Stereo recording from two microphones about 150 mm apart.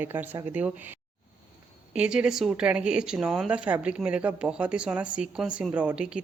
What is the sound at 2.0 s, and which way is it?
Speech, 5° right (ahead or behind).